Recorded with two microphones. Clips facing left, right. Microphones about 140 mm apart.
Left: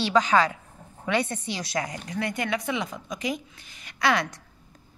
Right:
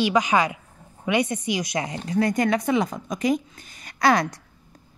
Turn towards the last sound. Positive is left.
turn(degrees=-40)  # may be behind; listen again after turning